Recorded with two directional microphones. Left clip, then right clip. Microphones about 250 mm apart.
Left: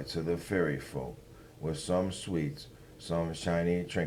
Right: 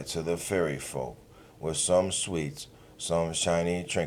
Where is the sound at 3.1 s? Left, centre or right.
Centre.